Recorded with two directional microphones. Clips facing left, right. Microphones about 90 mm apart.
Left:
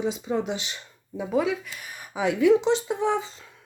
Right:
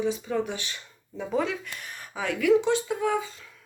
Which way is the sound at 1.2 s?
5° left (ahead or behind).